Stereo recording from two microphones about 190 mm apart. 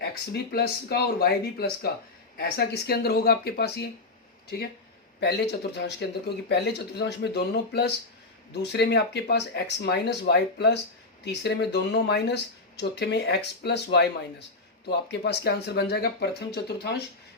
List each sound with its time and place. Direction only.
0.0 s speech: 55° left (ahead or behind)
5.2 s speech: 60° left (ahead or behind)